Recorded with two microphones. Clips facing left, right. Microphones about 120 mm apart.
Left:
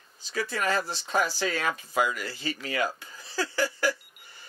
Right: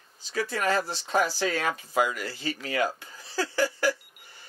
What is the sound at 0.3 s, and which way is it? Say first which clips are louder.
Speech: right 1 dB; 45° right (ahead or behind).